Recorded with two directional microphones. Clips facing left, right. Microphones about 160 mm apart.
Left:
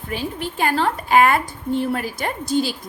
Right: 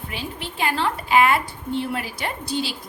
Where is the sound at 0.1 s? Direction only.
45° left (ahead or behind).